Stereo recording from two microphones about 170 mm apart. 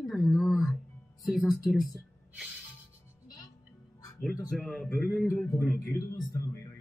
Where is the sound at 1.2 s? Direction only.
Centre (ahead or behind).